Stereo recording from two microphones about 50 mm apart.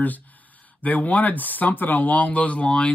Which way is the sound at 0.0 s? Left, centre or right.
Left.